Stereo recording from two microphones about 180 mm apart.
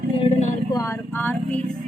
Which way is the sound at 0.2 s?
35° left (ahead or behind).